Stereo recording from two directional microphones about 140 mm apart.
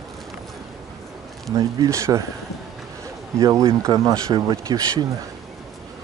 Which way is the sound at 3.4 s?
25° right (ahead or behind).